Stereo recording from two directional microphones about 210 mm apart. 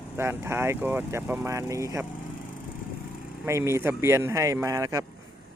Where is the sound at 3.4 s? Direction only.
15° right (ahead or behind).